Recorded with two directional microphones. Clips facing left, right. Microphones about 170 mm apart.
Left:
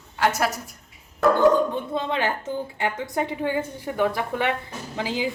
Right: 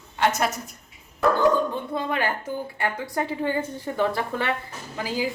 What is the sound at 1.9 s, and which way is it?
A woman's voice, 20° left (ahead or behind).